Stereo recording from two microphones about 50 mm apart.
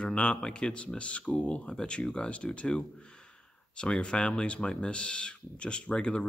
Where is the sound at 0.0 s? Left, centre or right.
Centre.